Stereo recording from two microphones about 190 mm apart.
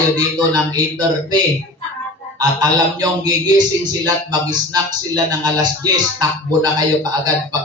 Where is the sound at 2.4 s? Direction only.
20° right (ahead or behind).